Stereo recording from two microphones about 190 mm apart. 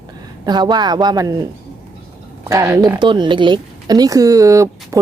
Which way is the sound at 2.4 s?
15° right (ahead or behind).